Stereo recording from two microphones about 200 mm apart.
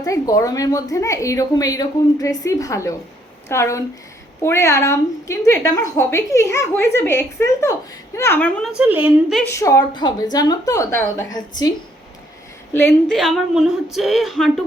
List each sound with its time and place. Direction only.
0.0 s a woman's voice: 15° left (ahead or behind); by 9.4 s 10° right (ahead or behind)
9.5 s a woman's voice: 15° left (ahead or behind)
12.9 s a woman's voice: centre (ahead or behind)